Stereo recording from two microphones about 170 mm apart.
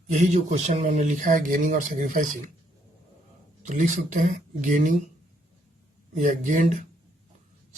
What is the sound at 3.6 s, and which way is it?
Speech, 50° right (ahead or behind).